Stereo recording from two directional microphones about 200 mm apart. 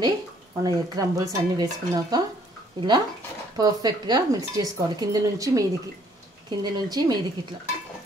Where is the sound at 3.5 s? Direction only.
20° right (ahead or behind).